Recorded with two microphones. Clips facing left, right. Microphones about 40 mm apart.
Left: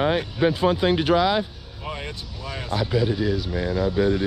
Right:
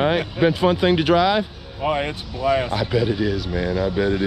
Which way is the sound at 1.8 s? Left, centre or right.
Right.